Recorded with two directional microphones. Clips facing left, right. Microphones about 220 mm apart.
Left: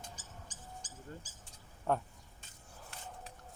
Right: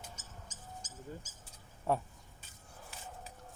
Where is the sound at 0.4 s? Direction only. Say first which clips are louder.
Right 3 dB; 30° left (ahead or behind).